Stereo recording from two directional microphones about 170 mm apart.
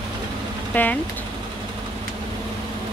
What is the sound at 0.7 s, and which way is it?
Speech, 10° left (ahead or behind).